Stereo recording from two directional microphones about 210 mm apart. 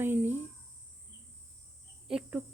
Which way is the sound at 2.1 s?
5° right (ahead or behind).